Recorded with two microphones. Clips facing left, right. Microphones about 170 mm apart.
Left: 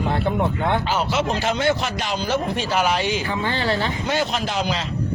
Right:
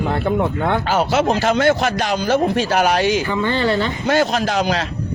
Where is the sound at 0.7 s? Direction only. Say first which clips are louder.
Right 4 dB; 45° right (ahead or behind).